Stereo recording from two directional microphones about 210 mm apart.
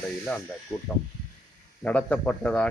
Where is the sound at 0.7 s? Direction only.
20° left (ahead or behind).